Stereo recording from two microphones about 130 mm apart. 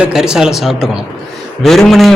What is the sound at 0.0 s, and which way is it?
A man's voice, 5° right (ahead or behind).